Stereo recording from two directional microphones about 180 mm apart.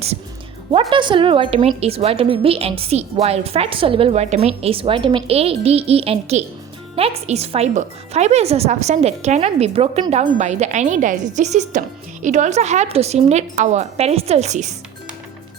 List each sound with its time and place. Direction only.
0.7 s a woman's voice: 30° right (ahead or behind)